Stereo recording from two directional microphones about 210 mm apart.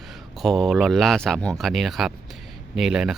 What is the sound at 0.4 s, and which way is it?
Speech, centre (ahead or behind).